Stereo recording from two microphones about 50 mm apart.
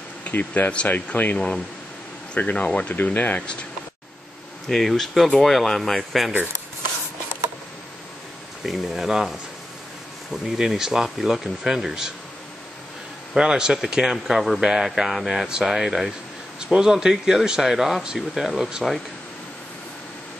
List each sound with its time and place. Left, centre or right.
0.2 s speech: left
2.5 s speech: left
2.9 s speech: left
4.6 s speech: centre
8.6 s speech: centre
10.3 s speech: centre
13.4 s speech: centre